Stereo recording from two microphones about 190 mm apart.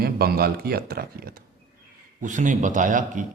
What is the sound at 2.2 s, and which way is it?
A man's voice, 40° right (ahead or behind).